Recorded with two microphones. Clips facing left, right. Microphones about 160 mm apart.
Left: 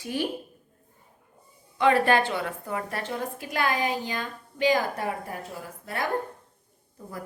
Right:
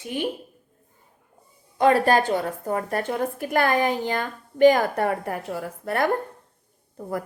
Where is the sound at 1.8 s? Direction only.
40° right (ahead or behind).